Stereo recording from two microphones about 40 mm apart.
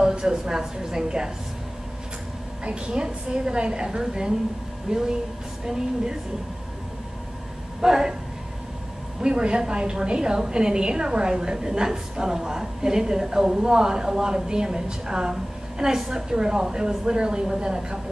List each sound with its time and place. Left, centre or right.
0.1 s a woman's voice: centre
2.6 s a woman's voice: right
7.8 s a woman's voice: centre
9.2 s a woman's voice: right